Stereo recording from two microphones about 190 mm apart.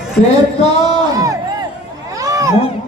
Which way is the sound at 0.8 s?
20° right (ahead or behind).